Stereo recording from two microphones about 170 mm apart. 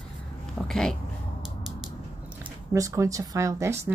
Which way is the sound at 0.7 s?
5° left (ahead or behind).